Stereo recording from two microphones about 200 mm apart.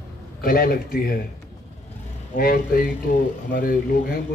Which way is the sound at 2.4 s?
45° left (ahead or behind).